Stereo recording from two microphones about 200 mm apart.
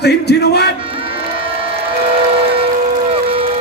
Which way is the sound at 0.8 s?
25° right (ahead or behind).